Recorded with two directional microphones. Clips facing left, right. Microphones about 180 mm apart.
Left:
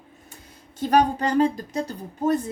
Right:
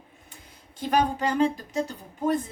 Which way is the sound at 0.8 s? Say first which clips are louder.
Left 4 dB; 45° left (ahead or behind).